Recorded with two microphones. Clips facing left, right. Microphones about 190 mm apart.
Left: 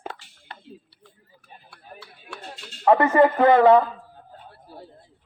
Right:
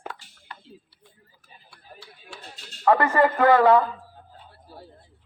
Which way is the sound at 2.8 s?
20° left (ahead or behind).